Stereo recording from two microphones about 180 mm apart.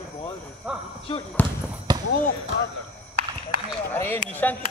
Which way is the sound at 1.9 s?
25° right (ahead or behind).